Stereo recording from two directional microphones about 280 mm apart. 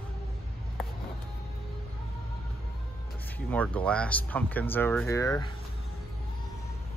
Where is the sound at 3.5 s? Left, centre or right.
Centre.